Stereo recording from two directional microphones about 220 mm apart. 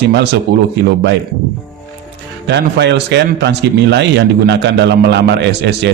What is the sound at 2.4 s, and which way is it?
Speech, 50° right (ahead or behind).